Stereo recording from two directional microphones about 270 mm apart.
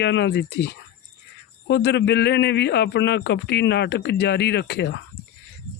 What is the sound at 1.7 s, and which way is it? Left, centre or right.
A man's voice, left.